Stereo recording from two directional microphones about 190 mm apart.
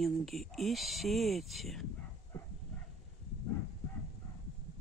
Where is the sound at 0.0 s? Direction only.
Centre (ahead or behind).